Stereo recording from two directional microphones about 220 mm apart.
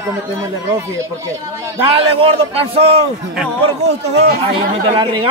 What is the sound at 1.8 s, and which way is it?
Speech, 25° right (ahead or behind).